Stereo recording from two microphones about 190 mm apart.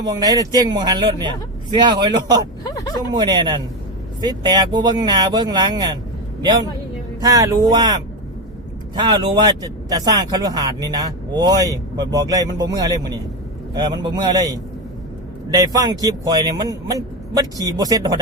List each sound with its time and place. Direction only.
0.0 s speech: 20° right (ahead or behind)
7.2 s speech: 20° right (ahead or behind)
9.0 s speech: 20° right (ahead or behind)
15.4 s speech: 20° right (ahead or behind)